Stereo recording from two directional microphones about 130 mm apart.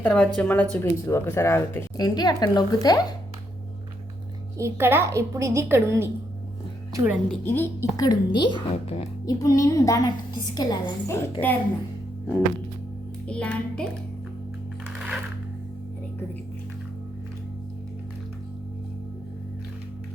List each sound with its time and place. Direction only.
0.0 s speech: 5° left (ahead or behind); by 3.0 s 30° left (ahead or behind)
4.5 s a woman's voice: 20° right (ahead or behind)
7.4 s speech: 15° left (ahead or behind)
7.9 s a woman's voice: 30° left (ahead or behind)
8.7 s speech: 50° left (ahead or behind)
9.2 s a woman's voice: 30° left (ahead or behind)
11.2 s speech: 15° left (ahead or behind)
13.2 s speech: 10° left (ahead or behind)
14.9 s music: 5° right (ahead or behind)